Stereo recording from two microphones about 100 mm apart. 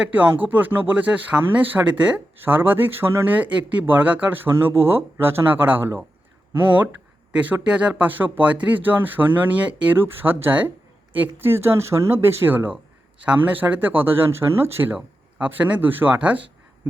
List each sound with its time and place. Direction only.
0.0 s speech: 15° right (ahead or behind)
7.3 s speech: 15° right (ahead or behind)